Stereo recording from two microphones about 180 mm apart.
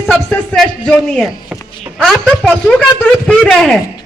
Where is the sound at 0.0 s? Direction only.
5° left (ahead or behind).